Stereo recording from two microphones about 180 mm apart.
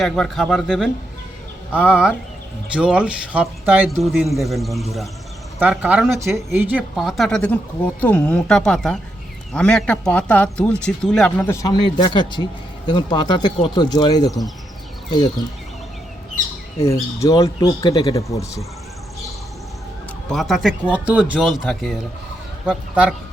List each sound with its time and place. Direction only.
0.0 s a man's voice: centre (ahead or behind)
11.6 s speech: 25° left (ahead or behind)
14.3 s a man's voice: centre (ahead or behind)
15.1 s speech: 25° left (ahead or behind)
16.8 s speech: 15° left (ahead or behind)
20.3 s a man's voice: centre (ahead or behind)